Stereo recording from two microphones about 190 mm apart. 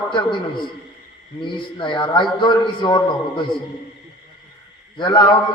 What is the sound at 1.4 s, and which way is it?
A man's voice, 25° left (ahead or behind).